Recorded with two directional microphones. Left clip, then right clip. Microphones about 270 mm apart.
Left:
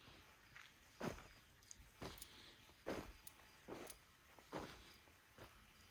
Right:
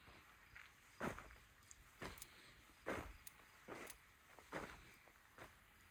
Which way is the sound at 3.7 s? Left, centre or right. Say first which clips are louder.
Even; centre.